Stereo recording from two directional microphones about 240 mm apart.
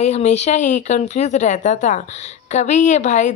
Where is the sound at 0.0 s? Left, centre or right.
Left.